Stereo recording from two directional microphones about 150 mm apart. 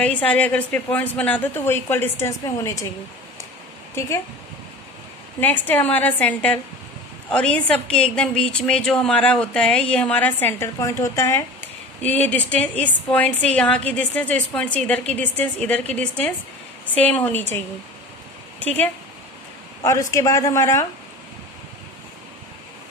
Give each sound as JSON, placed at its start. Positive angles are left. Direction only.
{"t": 0.0, "sound": "a woman's voice", "side_deg": 10}
{"t": 5.4, "sound": "a woman's voice", "side_deg": 10}
{"t": 18.6, "sound": "speech", "side_deg": 10}
{"t": 19.8, "sound": "speech", "side_deg": 20}